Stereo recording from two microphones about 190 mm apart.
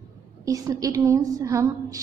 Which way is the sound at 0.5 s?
15° right (ahead or behind).